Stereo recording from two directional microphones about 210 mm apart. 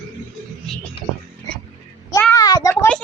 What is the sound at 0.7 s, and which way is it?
Music, centre (ahead or behind).